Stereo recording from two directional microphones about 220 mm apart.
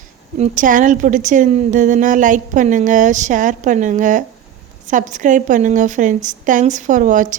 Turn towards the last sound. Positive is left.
turn(degrees=-35)  # may be behind; listen again after turning